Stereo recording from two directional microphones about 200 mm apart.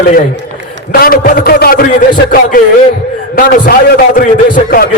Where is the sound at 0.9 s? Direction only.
45° left (ahead or behind).